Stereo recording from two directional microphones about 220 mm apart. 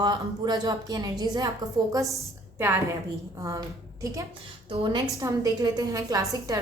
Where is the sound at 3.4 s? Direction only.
15° right (ahead or behind).